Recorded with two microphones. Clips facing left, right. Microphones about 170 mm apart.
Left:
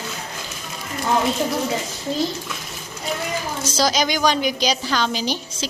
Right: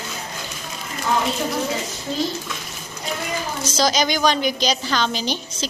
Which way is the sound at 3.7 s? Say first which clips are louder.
Even; 5° left (ahead or behind).